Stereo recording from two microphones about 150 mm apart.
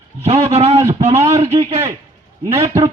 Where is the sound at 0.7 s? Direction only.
20° right (ahead or behind).